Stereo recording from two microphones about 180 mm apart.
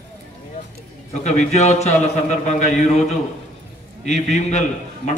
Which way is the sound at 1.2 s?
40° left (ahead or behind).